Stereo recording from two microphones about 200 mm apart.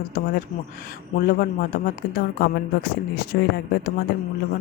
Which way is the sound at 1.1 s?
45° left (ahead or behind).